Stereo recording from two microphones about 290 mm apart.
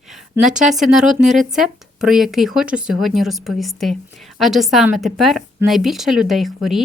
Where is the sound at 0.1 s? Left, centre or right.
Centre.